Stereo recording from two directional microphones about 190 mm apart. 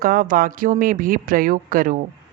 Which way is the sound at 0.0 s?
45° right (ahead or behind).